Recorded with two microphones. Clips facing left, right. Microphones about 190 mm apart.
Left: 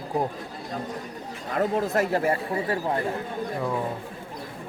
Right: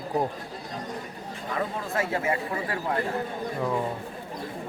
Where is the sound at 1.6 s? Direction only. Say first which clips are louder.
Left 6 dB; 40° left (ahead or behind).